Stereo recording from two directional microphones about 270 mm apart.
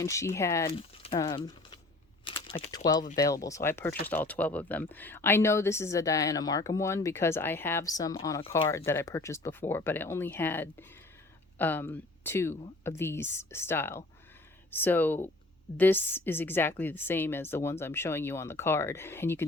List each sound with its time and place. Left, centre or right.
0.0 s speech: centre